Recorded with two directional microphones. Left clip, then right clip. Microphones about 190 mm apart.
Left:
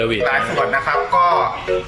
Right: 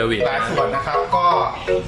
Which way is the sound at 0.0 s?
Centre (ahead or behind).